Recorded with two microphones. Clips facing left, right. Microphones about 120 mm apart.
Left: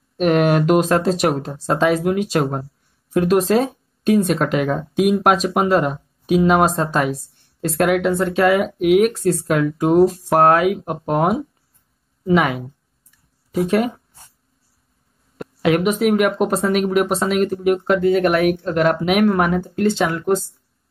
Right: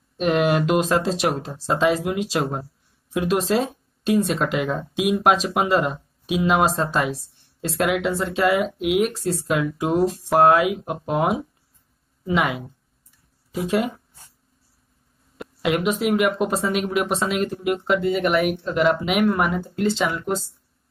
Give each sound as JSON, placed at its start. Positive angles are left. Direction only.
{"t": 0.2, "sound": "speech", "side_deg": 0}
{"t": 3.6, "sound": "a sound", "side_deg": 0}
{"t": 4.4, "sound": "speech", "side_deg": 0}
{"t": 15.3, "sound": "speech", "side_deg": 0}